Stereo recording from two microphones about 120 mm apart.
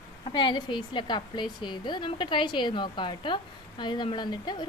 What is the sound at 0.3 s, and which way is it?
A woman's voice, 40° left (ahead or behind).